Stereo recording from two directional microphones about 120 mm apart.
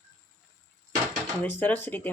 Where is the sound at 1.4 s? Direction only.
15° left (ahead or behind).